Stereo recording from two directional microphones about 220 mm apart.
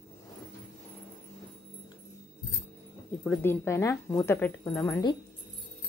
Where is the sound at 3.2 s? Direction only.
5° left (ahead or behind).